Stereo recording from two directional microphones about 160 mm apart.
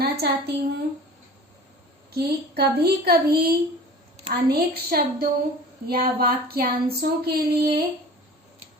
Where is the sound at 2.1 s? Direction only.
85° right.